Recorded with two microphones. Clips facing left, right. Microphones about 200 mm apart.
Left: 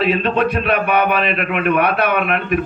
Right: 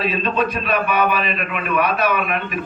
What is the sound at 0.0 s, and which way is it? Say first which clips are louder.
A man's voice: left 4 dB; 65° left (ahead or behind).